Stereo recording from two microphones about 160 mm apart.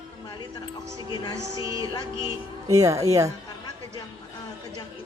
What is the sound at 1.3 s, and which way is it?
Speech, 20° right (ahead or behind).